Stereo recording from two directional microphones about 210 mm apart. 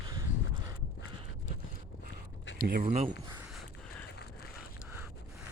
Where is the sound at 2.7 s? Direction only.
40° right (ahead or behind).